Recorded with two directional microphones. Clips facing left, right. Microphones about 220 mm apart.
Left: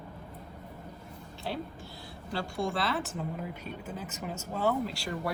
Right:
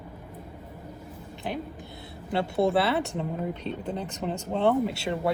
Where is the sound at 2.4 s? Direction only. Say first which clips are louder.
Right 9 dB; 65° right (ahead or behind).